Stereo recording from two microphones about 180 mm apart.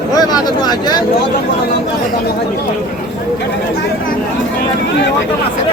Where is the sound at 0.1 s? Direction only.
20° left (ahead or behind).